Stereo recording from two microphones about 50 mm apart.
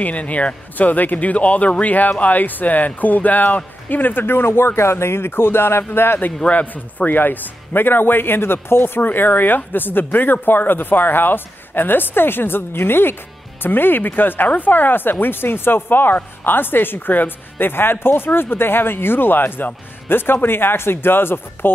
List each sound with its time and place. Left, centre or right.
0.0 s speech: left
6.4 s speech: left